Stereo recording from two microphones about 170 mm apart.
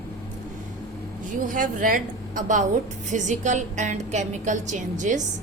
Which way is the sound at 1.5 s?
50° right (ahead or behind).